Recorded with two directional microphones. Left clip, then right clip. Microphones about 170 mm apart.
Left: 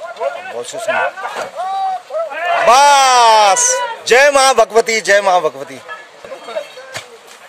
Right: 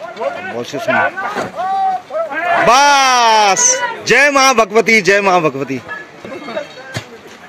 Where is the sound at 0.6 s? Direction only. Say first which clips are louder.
Right 3 dB; 15° left (ahead or behind).